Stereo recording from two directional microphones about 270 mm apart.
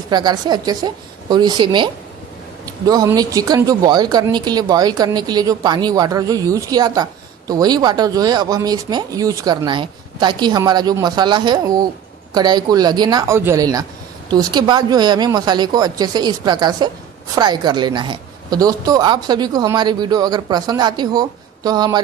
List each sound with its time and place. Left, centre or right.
0.1 s speech: centre